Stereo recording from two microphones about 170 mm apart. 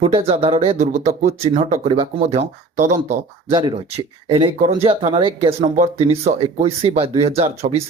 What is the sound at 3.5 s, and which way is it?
Speech, 30° right (ahead or behind).